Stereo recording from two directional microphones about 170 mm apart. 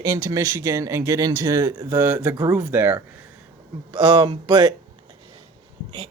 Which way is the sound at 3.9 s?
30° right (ahead or behind).